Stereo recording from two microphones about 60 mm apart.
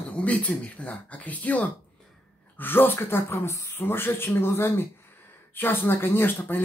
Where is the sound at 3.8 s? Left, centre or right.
Left.